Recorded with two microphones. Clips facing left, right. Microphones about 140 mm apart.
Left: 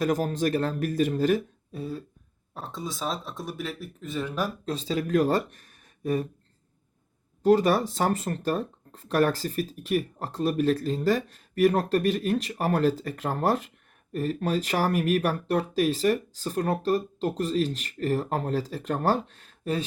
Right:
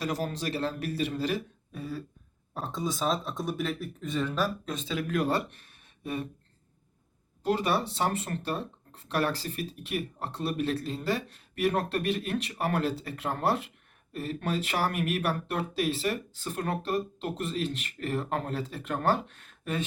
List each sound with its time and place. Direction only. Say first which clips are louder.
0.0 s speech: left 7 dB; 45° left (ahead or behind)
2.6 s speech: right 3 dB; centre (ahead or behind)
4.6 s speech: left 4 dB; 35° left (ahead or behind)
7.4 s speech: left 7 dB; 45° left (ahead or behind)